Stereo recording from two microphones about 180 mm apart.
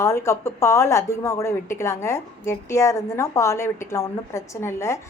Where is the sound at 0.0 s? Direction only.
15° left (ahead or behind).